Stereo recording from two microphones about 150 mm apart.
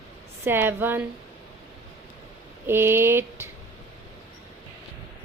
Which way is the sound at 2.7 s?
15° right (ahead or behind).